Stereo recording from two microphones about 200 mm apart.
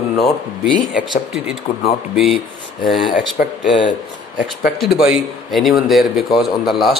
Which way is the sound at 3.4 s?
50° left (ahead or behind).